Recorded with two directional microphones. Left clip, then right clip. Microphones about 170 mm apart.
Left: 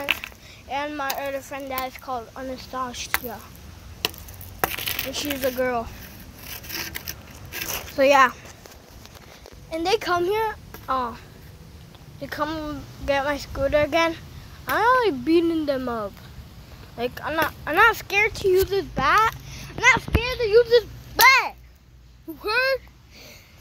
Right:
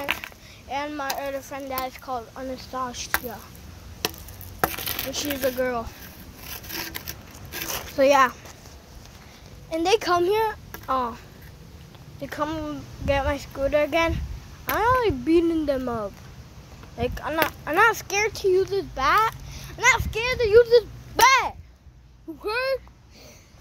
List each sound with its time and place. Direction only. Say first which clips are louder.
0.0 s a sound: left 3 dB; 40° right (ahead or behind)
0.7 s speech: left 1 dB; 5° left (ahead or behind)
4.6 s coin: left 1 dB; 65° right (ahead or behind)
5.1 s speech: right 1 dB; 10° left (ahead or behind)
6.5 s zipper: left 1 dB; 45° right (ahead or behind)
7.6 s biting: even; 15° right (ahead or behind)
7.9 s speech: left 1 dB; centre (ahead or behind)
9.7 s a child's voice: right 1 dB; 25° right (ahead or behind)
12.2 s speech: left 1 dB; 10° right (ahead or behind); by 20.1 s 10° left (ahead or behind)
20.2 s a child's voice: right 1 dB; 5° right (ahead or behind)
22.4 s speech: left 3 dB; 5° right (ahead or behind)